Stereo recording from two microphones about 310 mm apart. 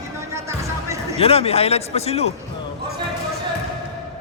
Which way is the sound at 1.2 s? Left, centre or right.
Centre.